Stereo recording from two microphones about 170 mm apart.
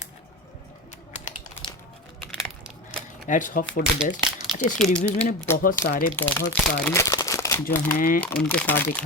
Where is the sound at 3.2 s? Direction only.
50° left (ahead or behind).